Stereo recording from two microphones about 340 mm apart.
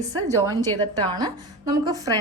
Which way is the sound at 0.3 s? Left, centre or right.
Centre.